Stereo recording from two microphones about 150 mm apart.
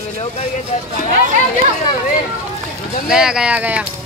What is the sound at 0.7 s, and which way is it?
Speech, 50° left (ahead or behind).